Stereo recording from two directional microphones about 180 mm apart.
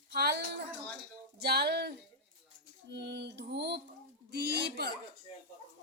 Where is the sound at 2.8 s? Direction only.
70° right (ahead or behind).